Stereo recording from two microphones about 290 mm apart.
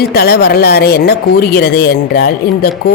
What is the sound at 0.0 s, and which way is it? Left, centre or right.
Speech, left.